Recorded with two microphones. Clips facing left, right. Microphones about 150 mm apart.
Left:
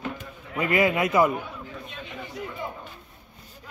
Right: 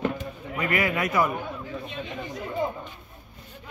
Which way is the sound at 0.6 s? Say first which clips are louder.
Left 4 dB; 25° left (ahead or behind).